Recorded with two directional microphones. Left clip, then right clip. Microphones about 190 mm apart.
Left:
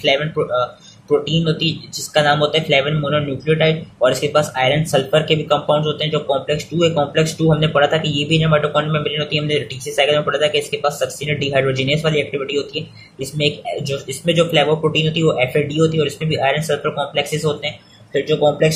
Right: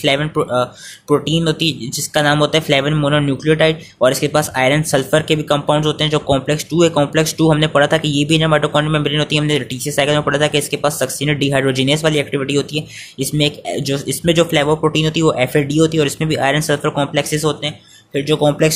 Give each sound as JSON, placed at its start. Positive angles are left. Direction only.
{"t": 0.0, "sound": "speech", "side_deg": -45}